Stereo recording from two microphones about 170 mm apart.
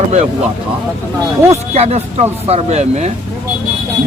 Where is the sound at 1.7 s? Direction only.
40° right (ahead or behind).